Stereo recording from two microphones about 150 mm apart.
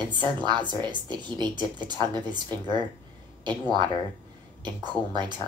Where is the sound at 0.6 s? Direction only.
30° right (ahead or behind).